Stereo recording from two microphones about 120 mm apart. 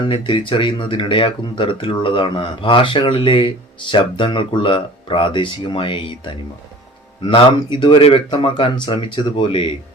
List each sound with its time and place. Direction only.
0.1 s speech: 45° left (ahead or behind)